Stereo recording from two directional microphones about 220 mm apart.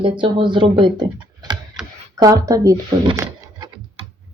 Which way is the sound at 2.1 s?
15° right (ahead or behind).